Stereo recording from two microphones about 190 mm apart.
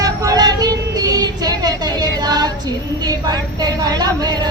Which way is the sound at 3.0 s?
20° right (ahead or behind).